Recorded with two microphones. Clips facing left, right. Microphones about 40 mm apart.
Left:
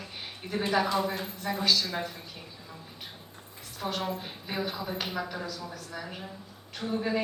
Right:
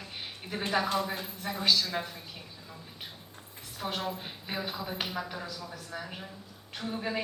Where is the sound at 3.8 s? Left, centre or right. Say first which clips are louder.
Left 2 dB; centre.